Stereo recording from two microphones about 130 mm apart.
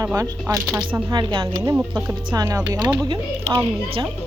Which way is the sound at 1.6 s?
15° right (ahead or behind).